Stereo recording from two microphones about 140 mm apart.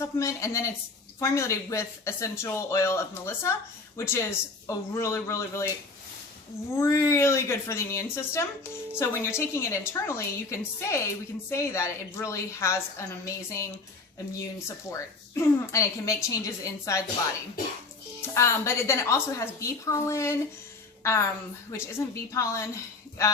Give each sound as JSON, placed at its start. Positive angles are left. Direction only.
{"t": 0.0, "sound": "speech", "side_deg": 20}
{"t": 6.7, "sound": "speech", "side_deg": 20}
{"t": 14.8, "sound": "speech", "side_deg": 20}
{"t": 18.3, "sound": "a woman's voice", "side_deg": 20}